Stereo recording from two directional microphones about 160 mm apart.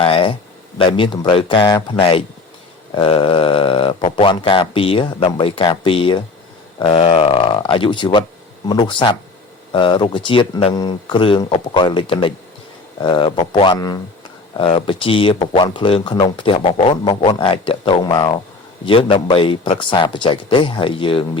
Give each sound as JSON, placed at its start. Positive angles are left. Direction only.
{"t": 0.0, "sound": "speech", "side_deg": 35}